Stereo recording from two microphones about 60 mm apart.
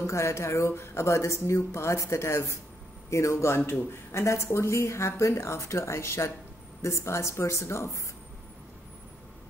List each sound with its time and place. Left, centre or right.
0.0 s speech: left